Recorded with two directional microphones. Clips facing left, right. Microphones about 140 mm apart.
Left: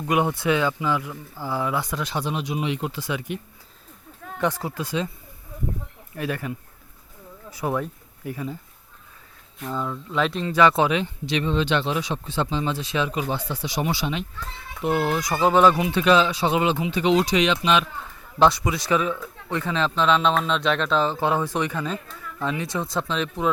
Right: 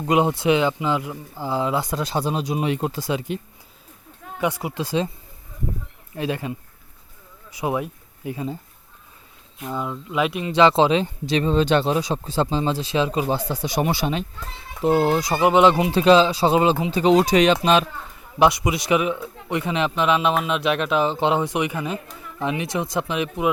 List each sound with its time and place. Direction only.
0.0 s speech: 25° right (ahead or behind)
4.4 s speech: 10° right (ahead or behind)
4.7 s speech: 30° right (ahead or behind)
6.1 s speech: 25° right (ahead or behind)
9.6 s speech: 15° right (ahead or behind)
10.5 s speech: 25° right (ahead or behind); by 14.3 s 45° right (ahead or behind)
14.3 s a child's voice: 30° right (ahead or behind)
15.4 s speech: 15° right (ahead or behind)
15.7 s speech: 30° right (ahead or behind)
18.3 s speech: 15° right (ahead or behind)